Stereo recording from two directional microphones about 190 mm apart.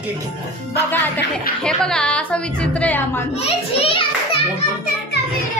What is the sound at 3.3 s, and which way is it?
A child's voice, 30° left (ahead or behind).